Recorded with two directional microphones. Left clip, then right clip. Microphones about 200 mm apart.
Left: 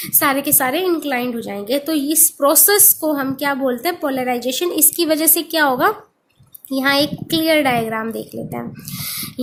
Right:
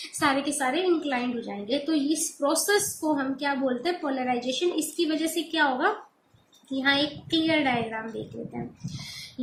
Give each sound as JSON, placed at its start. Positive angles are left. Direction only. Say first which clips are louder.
{"t": 0.2, "sound": "a woman's voice", "louder": "left 7 dB", "side_deg": 50}